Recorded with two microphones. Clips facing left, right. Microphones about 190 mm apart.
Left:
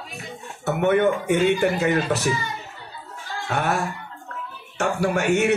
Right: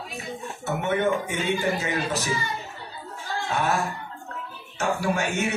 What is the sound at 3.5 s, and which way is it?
Speech, 65° left (ahead or behind).